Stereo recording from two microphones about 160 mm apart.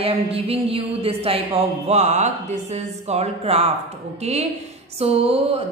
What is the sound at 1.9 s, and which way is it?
Speech, 45° right (ahead or behind).